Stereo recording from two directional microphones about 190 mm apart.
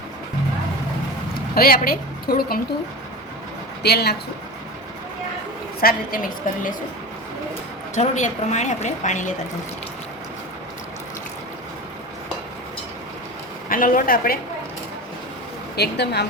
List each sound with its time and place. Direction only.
1.5 s a woman's voice: 50° left (ahead or behind)
3.8 s speech: 60° left (ahead or behind)
5.8 s a woman's voice: 45° left (ahead or behind)
7.9 s a woman's voice: 40° left (ahead or behind)
13.7 s a woman's voice: 45° left (ahead or behind)
15.7 s speech: 60° left (ahead or behind)